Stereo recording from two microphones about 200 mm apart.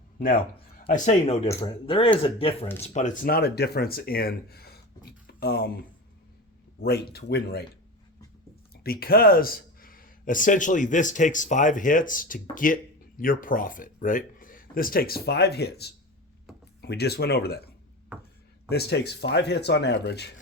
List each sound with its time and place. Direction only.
1.2 s speech: 30° left (ahead or behind); by 5.7 s 50° left (ahead or behind)
6.8 s speech: 50° left (ahead or behind)
8.7 s speech: 50° left (ahead or behind)
18.1 s a sound: 5° right (ahead or behind)
18.7 s speech: 55° left (ahead or behind)